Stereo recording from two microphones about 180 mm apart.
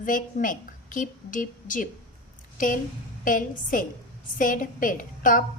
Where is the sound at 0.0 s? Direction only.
50° left (ahead or behind).